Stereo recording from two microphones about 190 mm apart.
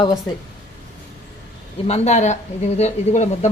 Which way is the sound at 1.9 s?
35° left (ahead or behind).